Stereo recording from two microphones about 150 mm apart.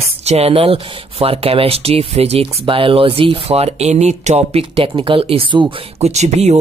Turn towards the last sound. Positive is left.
turn(degrees=-50)  # may be behind; listen again after turning